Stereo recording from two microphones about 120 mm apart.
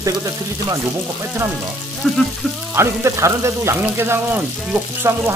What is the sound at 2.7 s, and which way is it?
Speech, 20° right (ahead or behind).